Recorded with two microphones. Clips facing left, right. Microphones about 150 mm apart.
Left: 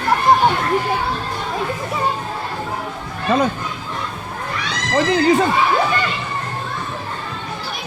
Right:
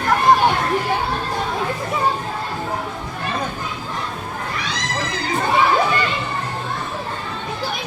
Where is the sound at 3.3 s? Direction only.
90° left.